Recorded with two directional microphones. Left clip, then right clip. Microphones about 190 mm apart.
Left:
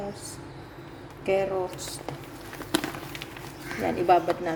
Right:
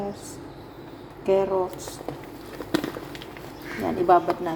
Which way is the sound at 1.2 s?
10° left (ahead or behind).